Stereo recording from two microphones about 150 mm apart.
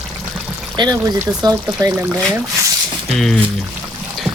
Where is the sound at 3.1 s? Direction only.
5° left (ahead or behind).